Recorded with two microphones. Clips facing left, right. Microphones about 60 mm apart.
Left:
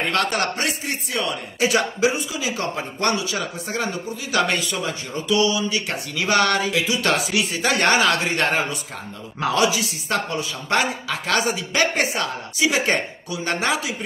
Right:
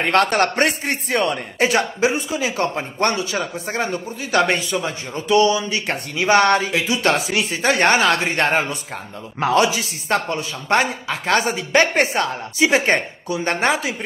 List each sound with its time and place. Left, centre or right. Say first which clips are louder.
0.0 s a man's voice: right 5 dB; right